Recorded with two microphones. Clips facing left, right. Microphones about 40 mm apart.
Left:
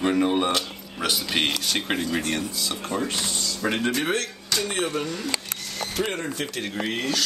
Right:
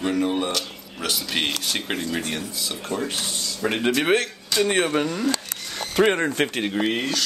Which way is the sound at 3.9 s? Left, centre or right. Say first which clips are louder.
Right 5 dB; right.